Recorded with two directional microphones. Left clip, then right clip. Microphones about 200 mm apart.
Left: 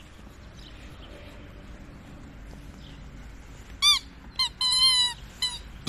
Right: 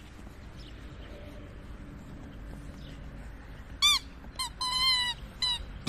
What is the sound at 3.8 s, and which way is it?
Squeak, 20° right (ahead or behind).